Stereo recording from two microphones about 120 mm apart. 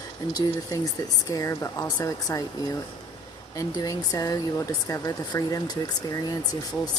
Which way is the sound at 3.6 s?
30° left (ahead or behind).